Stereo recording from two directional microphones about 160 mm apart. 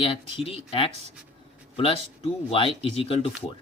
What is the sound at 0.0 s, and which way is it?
Speech, 35° left (ahead or behind).